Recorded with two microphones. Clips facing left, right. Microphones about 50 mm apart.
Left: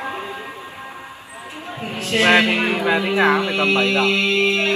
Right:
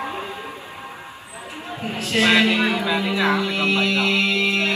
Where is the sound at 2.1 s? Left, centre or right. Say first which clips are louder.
Left 2 dB; left.